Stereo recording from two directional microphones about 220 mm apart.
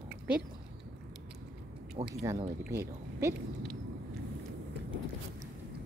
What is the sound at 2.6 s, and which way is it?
Speech, 10° right (ahead or behind).